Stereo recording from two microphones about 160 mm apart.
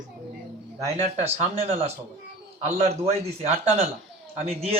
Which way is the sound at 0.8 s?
40° right (ahead or behind).